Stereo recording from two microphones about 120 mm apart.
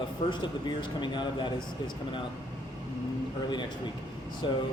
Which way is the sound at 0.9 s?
40° left (ahead or behind).